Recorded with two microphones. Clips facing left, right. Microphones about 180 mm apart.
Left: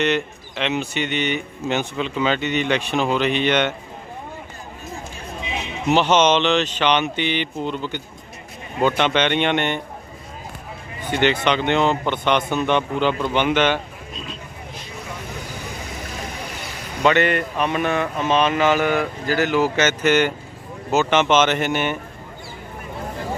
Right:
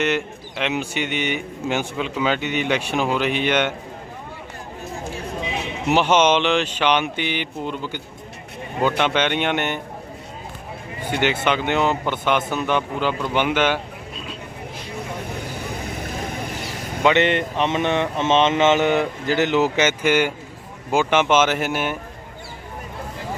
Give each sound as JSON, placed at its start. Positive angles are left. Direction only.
{"t": 0.0, "sound": "speech", "side_deg": -10}
{"t": 5.9, "sound": "speech", "side_deg": -10}
{"t": 11.0, "sound": "speech", "side_deg": -10}
{"t": 17.0, "sound": "speech", "side_deg": -20}